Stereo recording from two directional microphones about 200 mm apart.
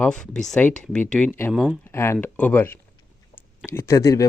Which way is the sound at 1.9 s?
10° left (ahead or behind).